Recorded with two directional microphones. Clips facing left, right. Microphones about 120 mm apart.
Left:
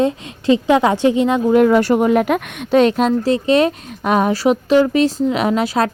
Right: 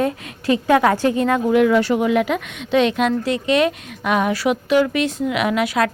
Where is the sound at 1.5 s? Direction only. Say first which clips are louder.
Left 4 dB; 40° left (ahead or behind).